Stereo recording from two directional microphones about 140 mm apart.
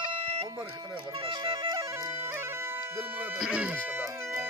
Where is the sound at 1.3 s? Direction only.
40° right (ahead or behind).